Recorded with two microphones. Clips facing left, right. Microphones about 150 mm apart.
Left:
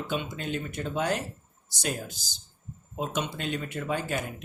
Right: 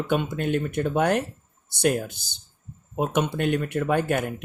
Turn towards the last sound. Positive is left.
turn(degrees=-60)  # may be behind; listen again after turning